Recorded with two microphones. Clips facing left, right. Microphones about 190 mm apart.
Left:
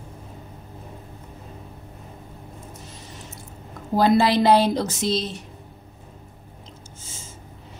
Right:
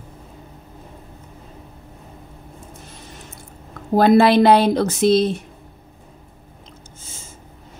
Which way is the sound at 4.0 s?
60° right (ahead or behind).